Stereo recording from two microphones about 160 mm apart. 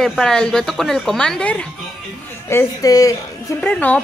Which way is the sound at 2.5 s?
20° left (ahead or behind).